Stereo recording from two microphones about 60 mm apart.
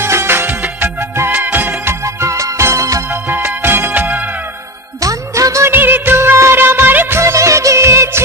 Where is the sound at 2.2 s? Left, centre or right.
Right.